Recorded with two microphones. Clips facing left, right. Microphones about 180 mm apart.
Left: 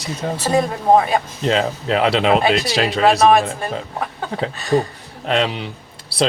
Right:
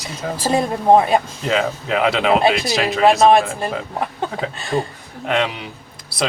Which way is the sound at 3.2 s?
30° right (ahead or behind).